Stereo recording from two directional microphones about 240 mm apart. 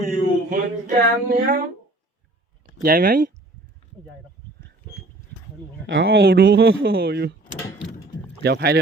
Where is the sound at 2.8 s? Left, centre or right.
Right.